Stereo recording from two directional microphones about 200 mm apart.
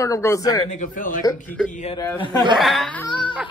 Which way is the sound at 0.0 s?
15° left (ahead or behind).